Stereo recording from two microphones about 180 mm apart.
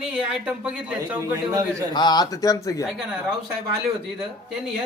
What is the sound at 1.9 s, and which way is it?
Speech, 25° left (ahead or behind).